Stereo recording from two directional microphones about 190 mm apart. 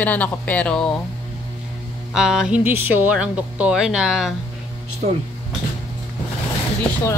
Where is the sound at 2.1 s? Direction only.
5° right (ahead or behind).